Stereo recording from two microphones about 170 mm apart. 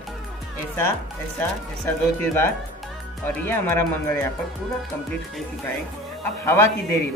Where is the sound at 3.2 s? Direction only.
10° left (ahead or behind).